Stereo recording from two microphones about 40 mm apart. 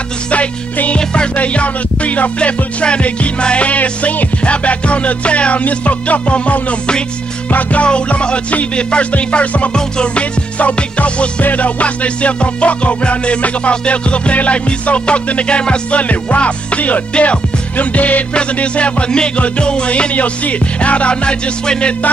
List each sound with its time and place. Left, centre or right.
0.3 s music: left
0.9 s music: left
2.3 s music: left
7.8 s music: left
9.8 s music: left
16.0 s music: left
18.3 s music: left